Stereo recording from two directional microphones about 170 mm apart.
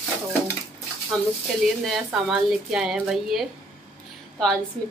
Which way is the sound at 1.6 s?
Centre (ahead or behind).